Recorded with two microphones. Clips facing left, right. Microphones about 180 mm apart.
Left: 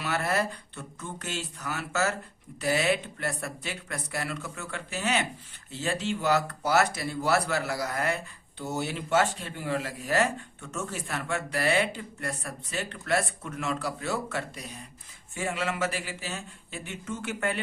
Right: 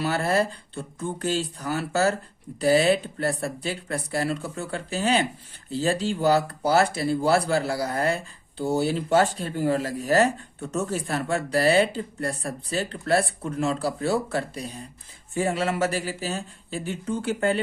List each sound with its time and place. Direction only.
0.0 s speech: 30° right (ahead or behind)